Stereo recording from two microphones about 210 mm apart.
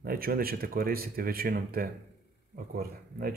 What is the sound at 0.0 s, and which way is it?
Speech, 45° right (ahead or behind).